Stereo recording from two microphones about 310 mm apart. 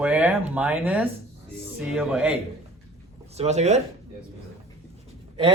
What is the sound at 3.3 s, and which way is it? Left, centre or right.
Speech, right.